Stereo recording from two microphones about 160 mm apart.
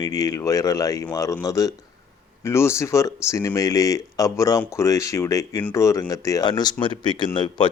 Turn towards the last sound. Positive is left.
turn(degrees=30)  # may be behind; listen again after turning